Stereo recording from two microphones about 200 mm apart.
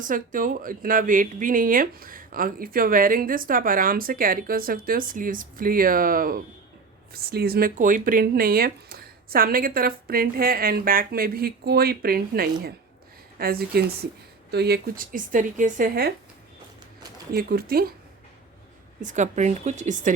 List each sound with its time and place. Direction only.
0.0 s speech: 40° right (ahead or behind)
17.3 s speech: 50° right (ahead or behind)
19.0 s speech: 35° right (ahead or behind)